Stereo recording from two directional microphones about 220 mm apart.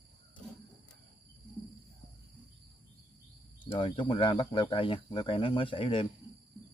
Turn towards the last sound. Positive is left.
turn(degrees=25)  # may be behind; listen again after turning